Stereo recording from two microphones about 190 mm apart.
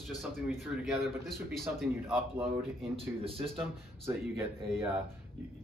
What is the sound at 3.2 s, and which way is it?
Speech, 30° right (ahead or behind).